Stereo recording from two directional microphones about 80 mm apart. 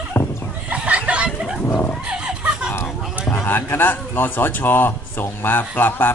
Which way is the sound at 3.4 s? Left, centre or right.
Left.